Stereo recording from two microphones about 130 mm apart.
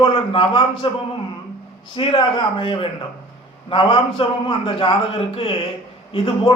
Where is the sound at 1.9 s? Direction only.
40° left (ahead or behind).